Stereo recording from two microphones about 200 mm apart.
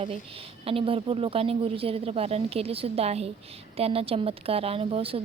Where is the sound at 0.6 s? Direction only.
25° right (ahead or behind).